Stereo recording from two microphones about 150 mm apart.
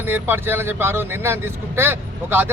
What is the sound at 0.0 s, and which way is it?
Speech, 15° right (ahead or behind).